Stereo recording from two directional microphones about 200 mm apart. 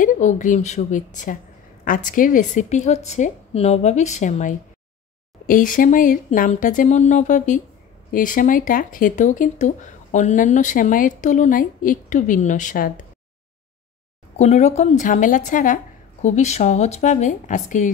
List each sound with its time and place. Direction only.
0.0 s speech: 40° left (ahead or behind)
14.3 s speech: 30° left (ahead or behind)